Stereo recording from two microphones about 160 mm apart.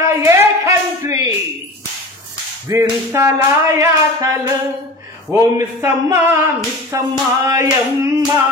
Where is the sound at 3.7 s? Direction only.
20° right (ahead or behind).